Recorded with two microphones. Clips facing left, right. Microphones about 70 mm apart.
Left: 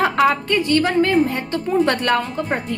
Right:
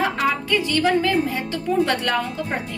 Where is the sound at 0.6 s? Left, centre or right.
Left.